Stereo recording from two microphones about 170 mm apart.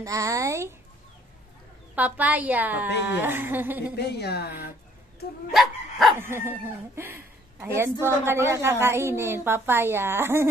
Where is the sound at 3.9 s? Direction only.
75° left (ahead or behind).